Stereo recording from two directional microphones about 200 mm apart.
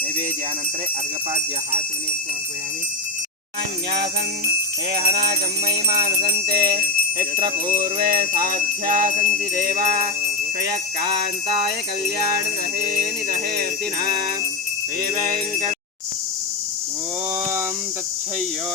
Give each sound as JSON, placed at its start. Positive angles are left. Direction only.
{"t": 4.9, "sound": "music", "side_deg": -50}
{"t": 13.6, "sound": "music", "side_deg": -45}